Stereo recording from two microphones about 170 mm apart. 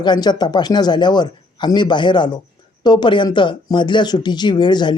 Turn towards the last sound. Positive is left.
turn(degrees=25)  # may be behind; listen again after turning